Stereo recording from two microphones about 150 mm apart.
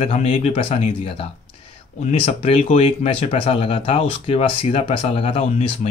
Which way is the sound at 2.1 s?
45° left (ahead or behind).